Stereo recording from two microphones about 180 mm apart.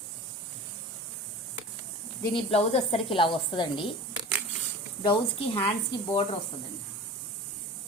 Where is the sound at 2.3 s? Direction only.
35° left (ahead or behind).